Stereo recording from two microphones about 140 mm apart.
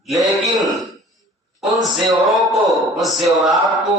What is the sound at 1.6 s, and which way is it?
A man's voice, centre (ahead or behind).